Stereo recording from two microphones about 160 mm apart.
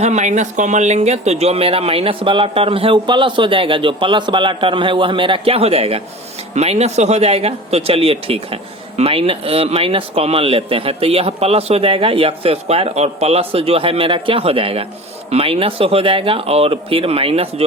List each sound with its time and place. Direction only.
0.0 s speech: 45° right (ahead or behind)